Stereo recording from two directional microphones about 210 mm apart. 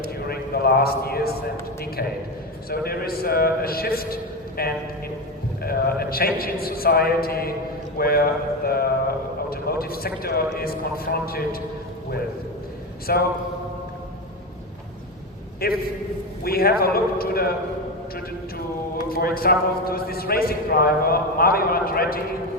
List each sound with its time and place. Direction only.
0.3 s a sound: 45° left (ahead or behind)
2.6 s a man's voice: 45° left (ahead or behind)
13.1 s a man's voice: 45° left (ahead or behind)
15.6 s a man's voice: 45° left (ahead or behind)
19.1 s a man's voice: 45° left (ahead or behind)